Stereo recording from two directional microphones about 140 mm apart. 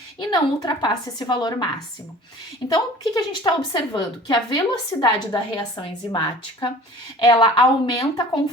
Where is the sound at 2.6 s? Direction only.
30° left (ahead or behind).